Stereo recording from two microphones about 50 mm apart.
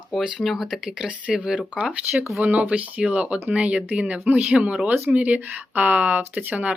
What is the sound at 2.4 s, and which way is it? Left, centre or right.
Speech, right.